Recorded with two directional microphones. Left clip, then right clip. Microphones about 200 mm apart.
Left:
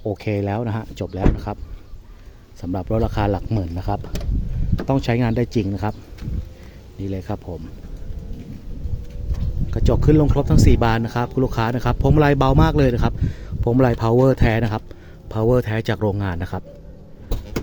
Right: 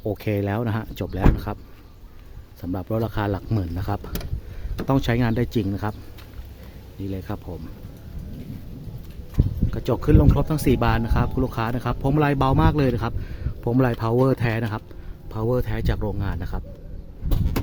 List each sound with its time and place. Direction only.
0.0 s speech: centre (ahead or behind)
2.6 s speech: 5° left (ahead or behind)
7.1 s speech: 10° left (ahead or behind)
9.7 s speech: 10° left (ahead or behind)